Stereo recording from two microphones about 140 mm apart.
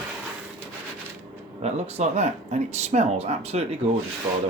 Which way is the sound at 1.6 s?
50° right (ahead or behind).